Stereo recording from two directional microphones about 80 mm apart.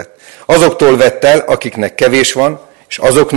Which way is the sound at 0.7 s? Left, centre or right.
Centre.